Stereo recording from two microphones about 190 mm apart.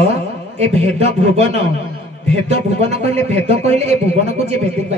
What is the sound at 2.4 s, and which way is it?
Speech, 35° right (ahead or behind).